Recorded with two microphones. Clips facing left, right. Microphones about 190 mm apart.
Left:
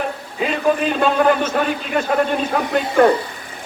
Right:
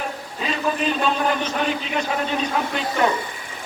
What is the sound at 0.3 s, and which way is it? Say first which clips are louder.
A man's voice: left 6 dB; 55° left (ahead or behind).